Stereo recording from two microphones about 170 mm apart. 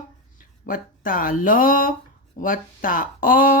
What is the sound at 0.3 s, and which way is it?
Speech, 50° left (ahead or behind).